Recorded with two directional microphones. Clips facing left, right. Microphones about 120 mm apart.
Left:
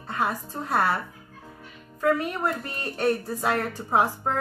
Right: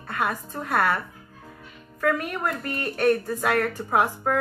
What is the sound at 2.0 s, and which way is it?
A woman's voice, 25° left (ahead or behind).